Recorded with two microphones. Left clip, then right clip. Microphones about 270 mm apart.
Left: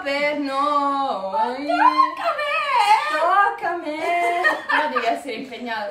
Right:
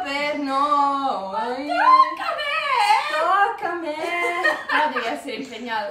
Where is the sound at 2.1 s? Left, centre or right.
Centre.